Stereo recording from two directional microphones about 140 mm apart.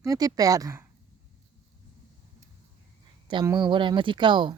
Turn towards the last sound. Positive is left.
turn(degrees=-35)  # may be behind; listen again after turning